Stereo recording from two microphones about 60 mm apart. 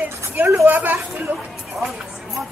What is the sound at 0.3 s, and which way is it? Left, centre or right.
A woman's voice, right.